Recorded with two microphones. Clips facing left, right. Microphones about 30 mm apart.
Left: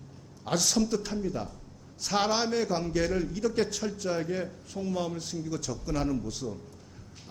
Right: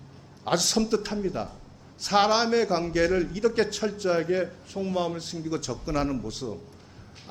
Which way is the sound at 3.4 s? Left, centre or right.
Right.